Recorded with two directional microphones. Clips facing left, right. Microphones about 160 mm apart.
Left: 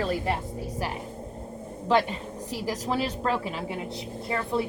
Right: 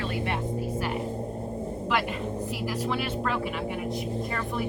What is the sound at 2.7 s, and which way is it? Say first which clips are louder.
Speech: left 3 dB; 35° left (ahead or behind).